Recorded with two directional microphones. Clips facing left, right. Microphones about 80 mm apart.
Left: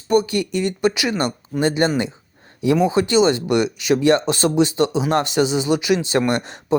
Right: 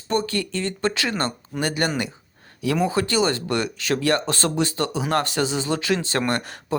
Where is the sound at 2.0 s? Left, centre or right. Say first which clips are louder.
Left 4 dB; left.